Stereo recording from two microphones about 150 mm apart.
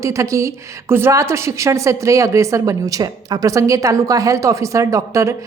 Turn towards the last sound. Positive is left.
turn(degrees=-20)  # may be behind; listen again after turning